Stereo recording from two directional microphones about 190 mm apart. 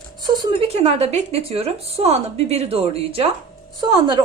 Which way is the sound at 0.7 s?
35° right (ahead or behind).